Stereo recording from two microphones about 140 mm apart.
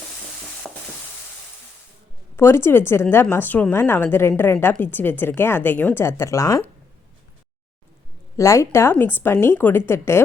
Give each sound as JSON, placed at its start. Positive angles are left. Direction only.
{"t": 0.7, "sound": "stir", "side_deg": 5}
{"t": 2.3, "sound": "speech", "side_deg": 20}
{"t": 8.4, "sound": "speech", "side_deg": 20}